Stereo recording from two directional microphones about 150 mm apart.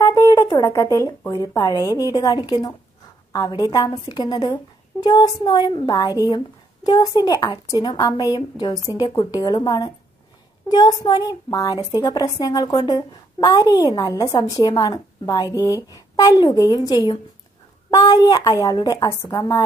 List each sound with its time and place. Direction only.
0.0 s a child's voice: 20° left (ahead or behind)